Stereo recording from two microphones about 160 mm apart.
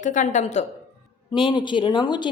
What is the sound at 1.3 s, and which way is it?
Speech, 30° left (ahead or behind).